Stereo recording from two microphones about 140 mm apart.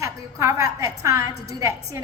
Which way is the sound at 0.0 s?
20° right (ahead or behind).